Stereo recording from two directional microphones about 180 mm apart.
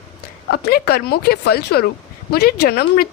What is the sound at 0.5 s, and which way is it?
Speech, 60° left (ahead or behind).